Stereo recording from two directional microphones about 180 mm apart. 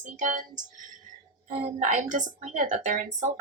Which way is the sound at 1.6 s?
45° right (ahead or behind).